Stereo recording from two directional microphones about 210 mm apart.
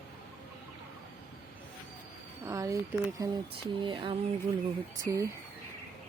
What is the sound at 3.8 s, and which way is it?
Speech, 25° right (ahead or behind).